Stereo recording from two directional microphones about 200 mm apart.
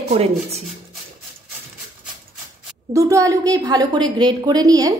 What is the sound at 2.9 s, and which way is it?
A woman's voice, 15° right (ahead or behind).